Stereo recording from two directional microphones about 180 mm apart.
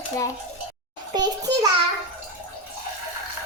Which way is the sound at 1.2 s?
20° right (ahead or behind).